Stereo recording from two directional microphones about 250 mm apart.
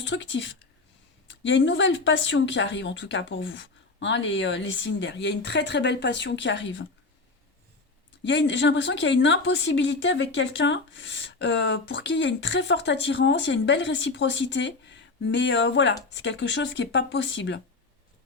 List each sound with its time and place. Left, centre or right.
0.0 s a woman's voice: left
8.3 s a woman's voice: left